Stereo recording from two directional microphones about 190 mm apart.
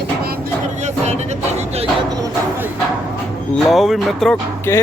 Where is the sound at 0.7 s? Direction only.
35° right (ahead or behind).